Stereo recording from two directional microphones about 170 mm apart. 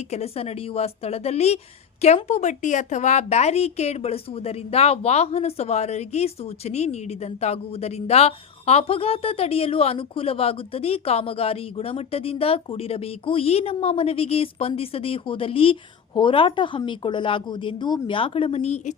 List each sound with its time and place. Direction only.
0.1 s speech: 40° left (ahead or behind)